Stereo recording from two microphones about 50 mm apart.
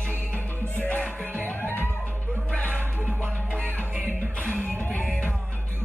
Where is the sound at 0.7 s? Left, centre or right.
Left.